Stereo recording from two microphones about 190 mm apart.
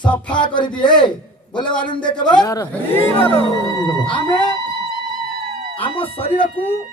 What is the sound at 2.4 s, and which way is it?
Music, 15° left (ahead or behind).